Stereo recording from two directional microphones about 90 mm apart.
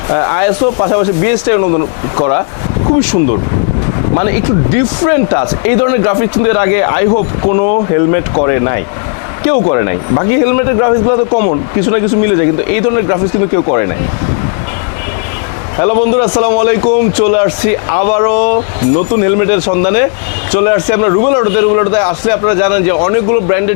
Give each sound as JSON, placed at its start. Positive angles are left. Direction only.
{"t": 0.1, "sound": "a man's voice", "side_deg": 25}
{"t": 3.0, "sound": "a man's voice", "side_deg": 20}
{"t": 11.0, "sound": "a man's voice", "side_deg": 35}
{"t": 11.3, "sound": "a man's voice", "side_deg": 20}
{"t": 15.8, "sound": "a man's voice", "side_deg": 20}